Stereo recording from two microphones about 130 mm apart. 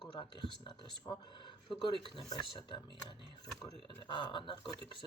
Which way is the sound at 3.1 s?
35° left (ahead or behind).